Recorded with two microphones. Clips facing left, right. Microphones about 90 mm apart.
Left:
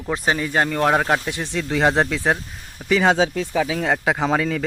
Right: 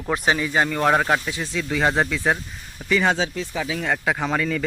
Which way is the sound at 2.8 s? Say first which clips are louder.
Left 3 dB; 10° left (ahead or behind).